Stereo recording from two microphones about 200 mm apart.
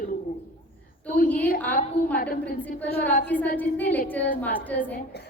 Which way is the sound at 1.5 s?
45° left (ahead or behind).